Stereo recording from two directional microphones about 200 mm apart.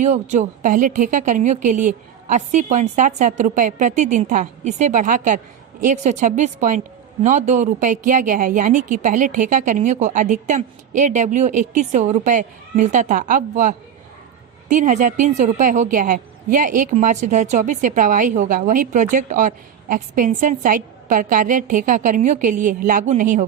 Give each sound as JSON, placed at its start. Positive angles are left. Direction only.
{"t": 0.0, "sound": "a woman's voice", "side_deg": -35}